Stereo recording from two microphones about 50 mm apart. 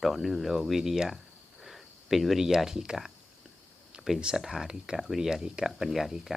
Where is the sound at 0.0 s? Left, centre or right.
Centre.